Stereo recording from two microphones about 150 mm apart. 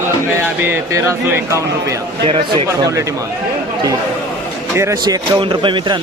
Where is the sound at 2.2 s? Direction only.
40° right (ahead or behind).